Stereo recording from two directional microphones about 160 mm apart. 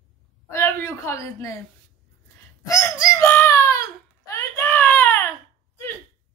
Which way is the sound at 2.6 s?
20° left (ahead or behind).